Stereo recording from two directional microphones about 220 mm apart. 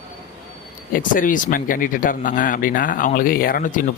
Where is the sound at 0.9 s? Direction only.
35° left (ahead or behind).